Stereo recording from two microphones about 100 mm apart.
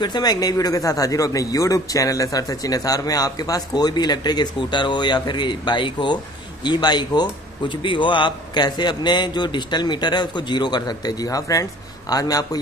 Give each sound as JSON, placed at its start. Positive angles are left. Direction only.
{"t": 0.0, "sound": "a man's voice", "side_deg": 45}